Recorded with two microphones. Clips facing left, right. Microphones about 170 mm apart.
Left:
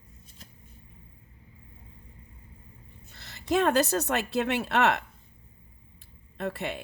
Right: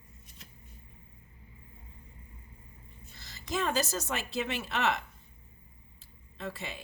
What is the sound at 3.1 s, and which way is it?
A woman's voice, 65° left (ahead or behind).